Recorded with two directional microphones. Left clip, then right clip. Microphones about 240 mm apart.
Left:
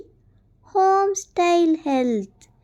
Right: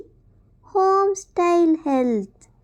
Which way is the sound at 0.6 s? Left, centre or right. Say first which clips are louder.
Even; centre.